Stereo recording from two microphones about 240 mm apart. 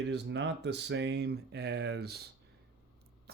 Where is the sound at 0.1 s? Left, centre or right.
Right.